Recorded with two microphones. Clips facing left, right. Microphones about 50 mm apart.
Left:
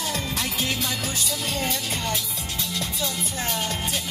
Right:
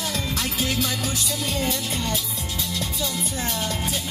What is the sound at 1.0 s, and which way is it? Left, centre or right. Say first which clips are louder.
Music: right 1 dB; left.